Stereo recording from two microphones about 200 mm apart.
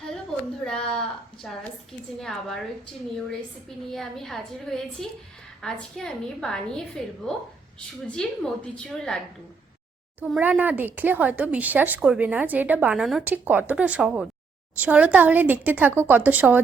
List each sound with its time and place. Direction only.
0.6 s a woman's voice: 5° left (ahead or behind)
10.2 s speech: 5° right (ahead or behind)